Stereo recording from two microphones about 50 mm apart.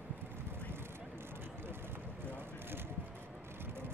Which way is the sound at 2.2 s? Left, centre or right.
Right.